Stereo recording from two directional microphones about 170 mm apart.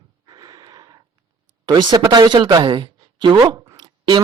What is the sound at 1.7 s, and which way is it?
A man's voice, 25° right (ahead or behind).